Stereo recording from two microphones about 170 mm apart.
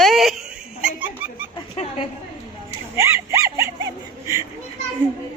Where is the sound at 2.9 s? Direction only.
15° right (ahead or behind).